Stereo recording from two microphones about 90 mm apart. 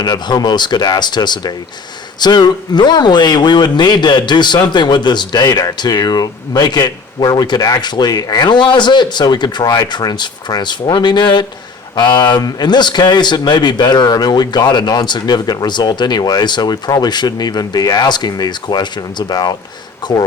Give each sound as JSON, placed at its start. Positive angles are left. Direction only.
{"t": 0.0, "sound": "a man's voice", "side_deg": 50}